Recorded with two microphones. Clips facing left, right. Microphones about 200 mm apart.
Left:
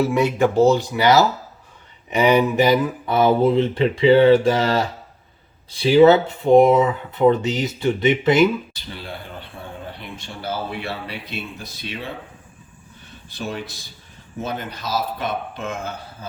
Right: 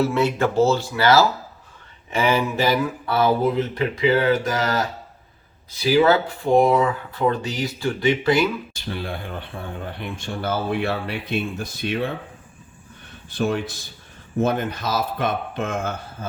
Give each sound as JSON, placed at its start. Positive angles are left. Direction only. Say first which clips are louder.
{"t": 0.0, "sound": "speech", "louder": "left 2 dB", "side_deg": 15}
{"t": 8.7, "sound": "speech", "louder": "right 5 dB", "side_deg": -55}
{"t": 13.3, "sound": "speech", "louder": "right 6 dB", "side_deg": -50}